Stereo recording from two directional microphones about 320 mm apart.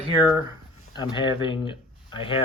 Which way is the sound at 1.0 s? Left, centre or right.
Centre.